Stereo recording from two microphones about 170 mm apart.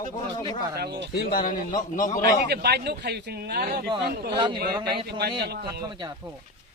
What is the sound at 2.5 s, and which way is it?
A man's voice, 75° right (ahead or behind).